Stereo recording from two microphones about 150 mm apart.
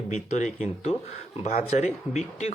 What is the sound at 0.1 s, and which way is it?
Speech, 50° left (ahead or behind).